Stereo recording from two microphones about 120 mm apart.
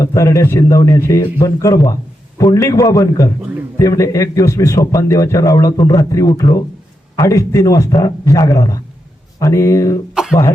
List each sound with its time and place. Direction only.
0.0 s a man's voice: 25° left (ahead or behind)